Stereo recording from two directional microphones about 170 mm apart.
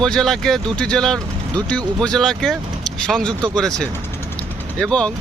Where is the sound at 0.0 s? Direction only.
5° left (ahead or behind).